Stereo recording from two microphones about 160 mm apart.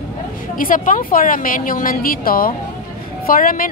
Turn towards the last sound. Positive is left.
turn(degrees=60)  # may be behind; listen again after turning